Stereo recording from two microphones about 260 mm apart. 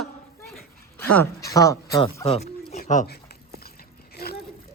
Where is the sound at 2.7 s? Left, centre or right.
Left.